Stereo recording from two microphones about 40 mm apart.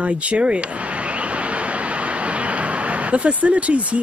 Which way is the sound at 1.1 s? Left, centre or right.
Right.